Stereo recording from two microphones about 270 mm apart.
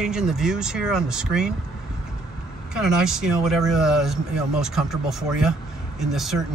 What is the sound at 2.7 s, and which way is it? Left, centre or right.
Speech, centre.